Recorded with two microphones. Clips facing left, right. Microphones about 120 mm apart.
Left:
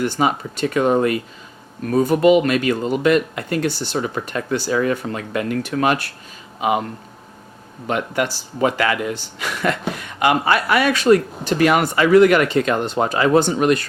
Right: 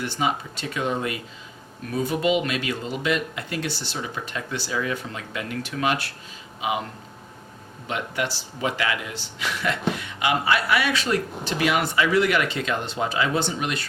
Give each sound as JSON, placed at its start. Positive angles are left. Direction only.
{"t": 0.0, "sound": "speech", "side_deg": 50}
{"t": 7.9, "sound": "speech", "side_deg": 50}